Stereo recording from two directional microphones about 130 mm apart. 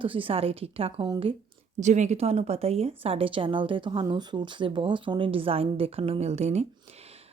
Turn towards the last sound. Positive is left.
turn(degrees=-55)  # may be behind; listen again after turning